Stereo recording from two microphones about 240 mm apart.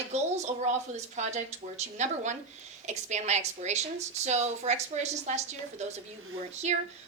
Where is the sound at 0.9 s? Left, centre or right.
Right.